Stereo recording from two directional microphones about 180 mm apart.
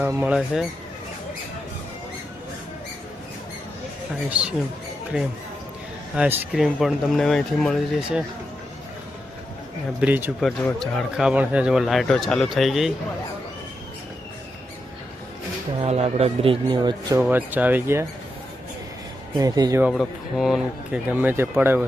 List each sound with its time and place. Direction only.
0.0 s speech: 10° right (ahead or behind)
4.3 s speech: 5° right (ahead or behind)
6.1 s speech: 10° right (ahead or behind)
6.6 s speech: centre (ahead or behind)
10.0 s speech: 10° right (ahead or behind)
10.4 s speech: centre (ahead or behind)
15.8 s speech: 35° right (ahead or behind)
17.2 s speech: 10° right (ahead or behind)
19.4 s speech: 20° right (ahead or behind)
19.8 s speech: centre (ahead or behind)